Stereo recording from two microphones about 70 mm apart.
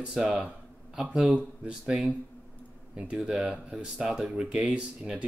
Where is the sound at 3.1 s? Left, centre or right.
Centre.